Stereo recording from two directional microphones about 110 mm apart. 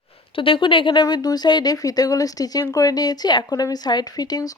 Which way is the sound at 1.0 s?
35° left (ahead or behind).